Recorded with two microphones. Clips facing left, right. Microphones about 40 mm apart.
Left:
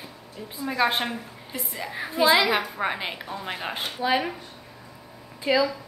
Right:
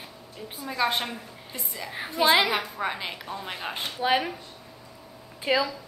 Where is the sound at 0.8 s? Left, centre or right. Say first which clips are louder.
Left 2 dB; left.